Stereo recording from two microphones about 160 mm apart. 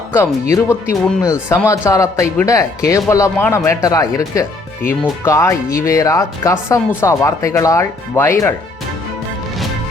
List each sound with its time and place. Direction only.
0.5 s speech: 15° left (ahead or behind)